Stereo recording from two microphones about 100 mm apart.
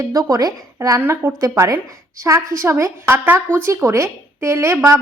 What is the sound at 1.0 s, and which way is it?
Speech, 25° right (ahead or behind).